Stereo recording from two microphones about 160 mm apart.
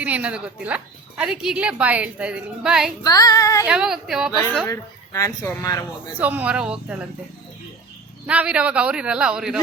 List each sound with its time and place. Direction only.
0.0 s a woman's voice: 10° right (ahead or behind)
3.0 s speech: 25° left (ahead or behind)
3.7 s speech: 5° right (ahead or behind)
4.6 s speech: 20° left (ahead or behind)
6.1 s a woman's voice: 10° right (ahead or behind)
8.3 s a woman's voice: 5° right (ahead or behind)